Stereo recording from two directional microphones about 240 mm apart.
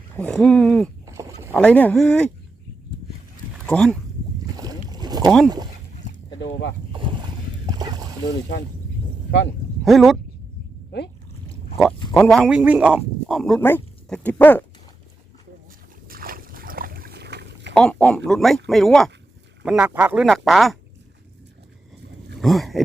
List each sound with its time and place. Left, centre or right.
0.2 s speech: centre
1.0 s vehicle: centre
1.5 s speech: centre
3.7 s speech: centre
4.5 s boat: centre
5.2 s speech: centre
6.4 s speech: left
7.7 s a sound: centre
8.3 s speech: left
9.8 s speech: centre
12.1 s speech: centre
16.0 s boat: right
17.7 s speech: centre
22.4 s a sound: centre